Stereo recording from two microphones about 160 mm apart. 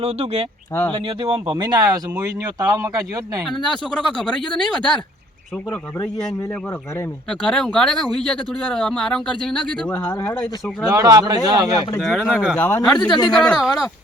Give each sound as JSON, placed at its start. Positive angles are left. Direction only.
{"t": 0.0, "sound": "speech", "side_deg": -40}
{"t": 3.5, "sound": "speech", "side_deg": 5}
{"t": 7.3, "sound": "speech", "side_deg": 5}
{"t": 10.8, "sound": "speech", "side_deg": -20}
{"t": 11.9, "sound": "speech", "side_deg": 5}